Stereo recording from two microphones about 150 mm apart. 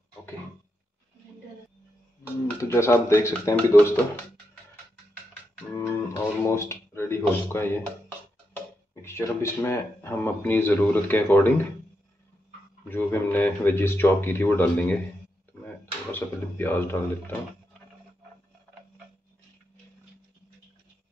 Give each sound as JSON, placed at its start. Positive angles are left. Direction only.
{"t": 2.7, "sound": "speech", "side_deg": 15}
{"t": 5.8, "sound": "music", "side_deg": 20}
{"t": 8.9, "sound": "speech", "side_deg": 20}
{"t": 12.8, "sound": "speech", "side_deg": 15}